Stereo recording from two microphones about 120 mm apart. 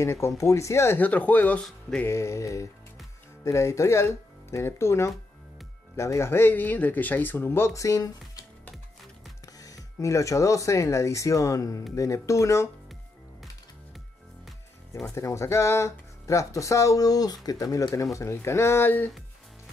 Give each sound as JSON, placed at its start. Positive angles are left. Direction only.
{"t": 0.0, "sound": "speech", "side_deg": 25}
{"t": 2.1, "sound": "speech", "side_deg": 25}
{"t": 9.5, "sound": "speech", "side_deg": 30}
{"t": 15.0, "sound": "speech", "side_deg": 25}